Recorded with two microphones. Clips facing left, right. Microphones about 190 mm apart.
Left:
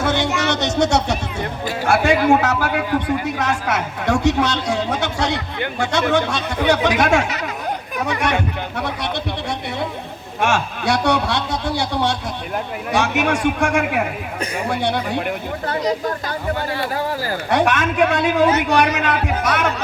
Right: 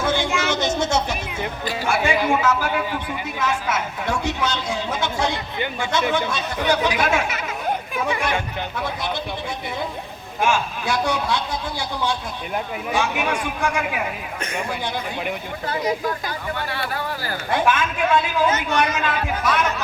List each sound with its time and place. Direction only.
0.0 s a sound: 70° left (ahead or behind)
0.4 s a man's voice: 70° left (ahead or behind)
2.4 s a man's voice: 65° left (ahead or behind)
16.6 s speech: 35° left (ahead or behind)
17.5 s a man's voice: 70° left (ahead or behind)